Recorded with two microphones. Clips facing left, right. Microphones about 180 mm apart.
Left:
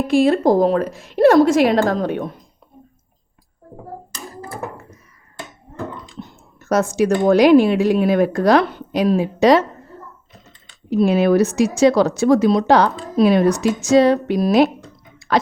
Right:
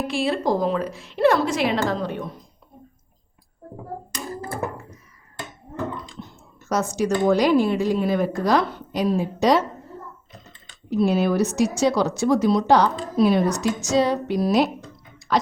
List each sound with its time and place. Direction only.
0.1 s a woman's voice: 45° left (ahead or behind)
6.6 s speech: 70° left (ahead or behind)
10.8 s speech: 75° left (ahead or behind)